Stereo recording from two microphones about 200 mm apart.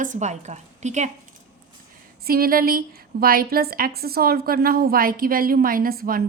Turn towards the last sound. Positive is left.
turn(degrees=-50)  # may be behind; listen again after turning